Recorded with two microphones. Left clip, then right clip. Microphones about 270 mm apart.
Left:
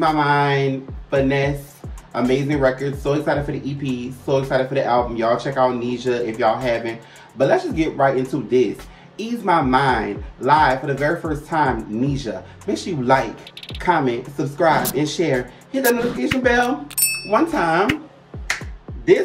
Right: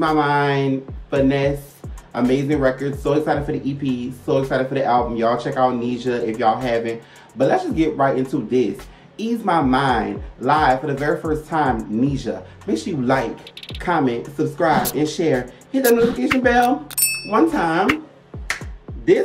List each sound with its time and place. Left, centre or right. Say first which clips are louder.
0.0 s speech: even; centre